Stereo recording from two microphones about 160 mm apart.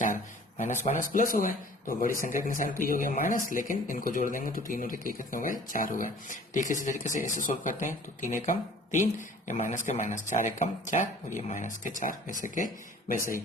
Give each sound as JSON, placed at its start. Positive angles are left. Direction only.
{"t": 0.9, "sound": "speech", "side_deg": 55}